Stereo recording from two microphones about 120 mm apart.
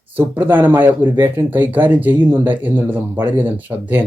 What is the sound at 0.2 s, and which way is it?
Speech, 15° right (ahead or behind).